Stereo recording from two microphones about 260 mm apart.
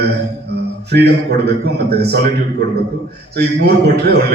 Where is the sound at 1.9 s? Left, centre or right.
Right.